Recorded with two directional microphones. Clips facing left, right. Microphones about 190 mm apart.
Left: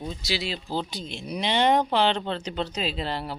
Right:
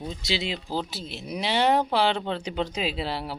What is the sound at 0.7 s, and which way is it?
Speech, 5° right (ahead or behind).